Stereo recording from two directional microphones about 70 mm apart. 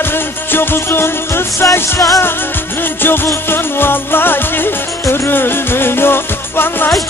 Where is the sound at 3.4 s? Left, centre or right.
Left.